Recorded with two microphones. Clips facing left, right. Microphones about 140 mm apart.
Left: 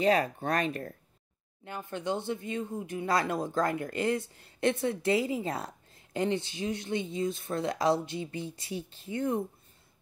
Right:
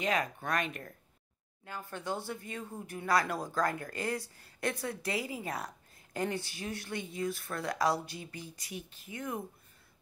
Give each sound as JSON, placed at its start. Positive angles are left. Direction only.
{"t": 0.0, "sound": "speech", "side_deg": 35}
{"t": 1.6, "sound": "speech", "side_deg": 20}